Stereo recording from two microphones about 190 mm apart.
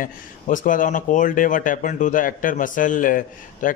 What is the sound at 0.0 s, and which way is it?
Speech, 45° left (ahead or behind).